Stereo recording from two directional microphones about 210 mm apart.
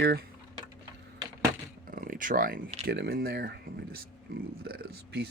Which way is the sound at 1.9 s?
40° right (ahead or behind).